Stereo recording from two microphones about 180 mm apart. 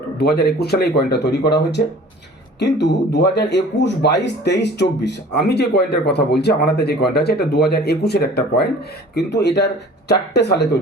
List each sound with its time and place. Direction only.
0.2 s speech: 65° left (ahead or behind)